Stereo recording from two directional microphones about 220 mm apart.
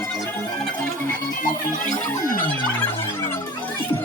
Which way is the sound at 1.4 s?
35° left (ahead or behind).